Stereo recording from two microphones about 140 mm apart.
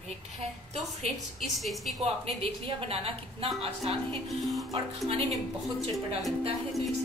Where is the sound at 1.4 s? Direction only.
Centre (ahead or behind).